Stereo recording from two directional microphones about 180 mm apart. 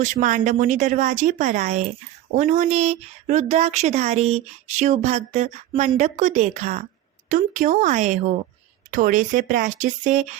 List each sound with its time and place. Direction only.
0.0 s speech: 45° right (ahead or behind)